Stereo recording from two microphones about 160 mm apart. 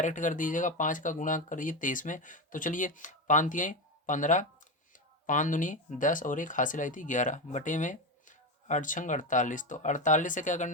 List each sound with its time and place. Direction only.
0.0 s speech: 50° left (ahead or behind)